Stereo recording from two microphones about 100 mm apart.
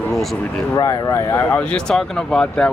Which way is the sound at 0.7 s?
45° left (ahead or behind).